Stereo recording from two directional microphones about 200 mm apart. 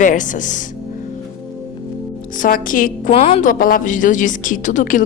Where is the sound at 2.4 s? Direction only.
45° left (ahead or behind).